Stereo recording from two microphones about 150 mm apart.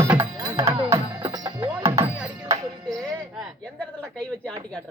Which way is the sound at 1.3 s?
30° right (ahead or behind).